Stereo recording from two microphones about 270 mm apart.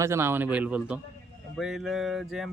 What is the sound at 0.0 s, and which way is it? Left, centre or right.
Speech, centre.